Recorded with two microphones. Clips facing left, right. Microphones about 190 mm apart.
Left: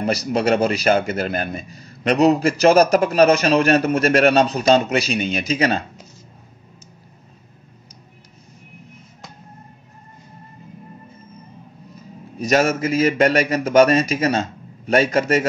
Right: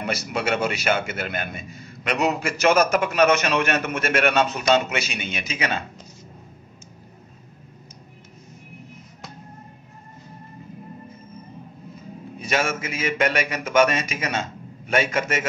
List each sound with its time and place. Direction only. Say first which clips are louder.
0.0 s speech: left 7 dB; 35° left (ahead or behind)
12.4 s speech: left 7 dB; 40° left (ahead or behind)